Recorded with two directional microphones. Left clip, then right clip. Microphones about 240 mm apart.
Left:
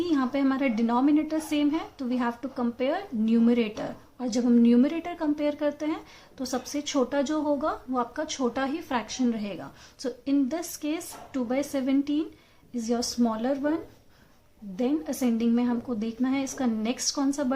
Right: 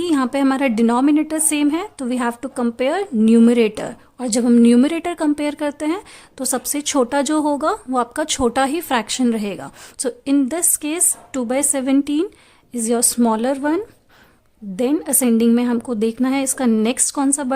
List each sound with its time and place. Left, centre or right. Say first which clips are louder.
0.0 s a woman's voice: right 8 dB; right